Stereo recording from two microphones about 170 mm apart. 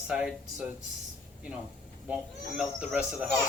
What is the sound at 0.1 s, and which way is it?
Speech, 5° right (ahead or behind).